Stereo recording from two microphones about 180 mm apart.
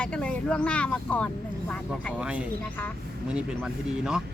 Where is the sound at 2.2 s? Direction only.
5° right (ahead or behind).